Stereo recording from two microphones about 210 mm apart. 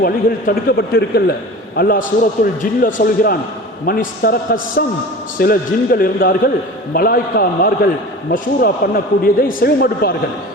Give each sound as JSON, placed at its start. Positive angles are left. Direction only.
{"t": 0.0, "sound": "a man's voice", "side_deg": 45}